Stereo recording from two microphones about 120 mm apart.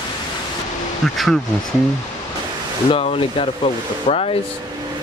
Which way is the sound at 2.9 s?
50° left (ahead or behind).